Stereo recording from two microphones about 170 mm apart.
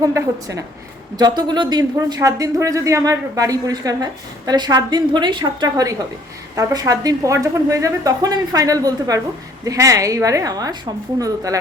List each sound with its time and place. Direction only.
0.0 s speech: 20° right (ahead or behind)